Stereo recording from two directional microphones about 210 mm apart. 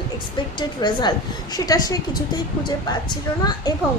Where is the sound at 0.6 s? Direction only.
20° left (ahead or behind).